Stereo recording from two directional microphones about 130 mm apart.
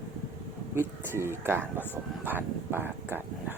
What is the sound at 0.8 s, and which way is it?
Speech, 20° right (ahead or behind).